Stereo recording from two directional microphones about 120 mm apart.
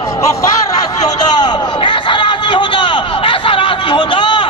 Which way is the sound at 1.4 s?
40° left (ahead or behind).